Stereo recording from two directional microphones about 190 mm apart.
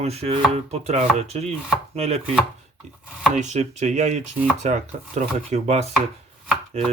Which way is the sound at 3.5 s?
35° right (ahead or behind).